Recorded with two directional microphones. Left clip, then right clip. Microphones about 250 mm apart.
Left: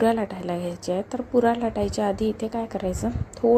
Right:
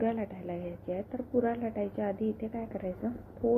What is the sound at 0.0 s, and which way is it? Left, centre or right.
A woman's voice, left.